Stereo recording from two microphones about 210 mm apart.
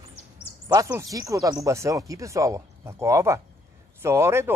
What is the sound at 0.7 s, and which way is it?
Speech, 15° right (ahead or behind).